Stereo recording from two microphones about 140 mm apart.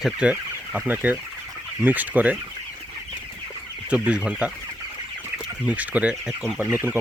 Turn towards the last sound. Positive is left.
turn(degrees=-15)  # may be behind; listen again after turning